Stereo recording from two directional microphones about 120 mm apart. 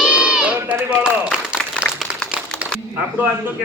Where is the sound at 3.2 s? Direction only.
15° right (ahead or behind).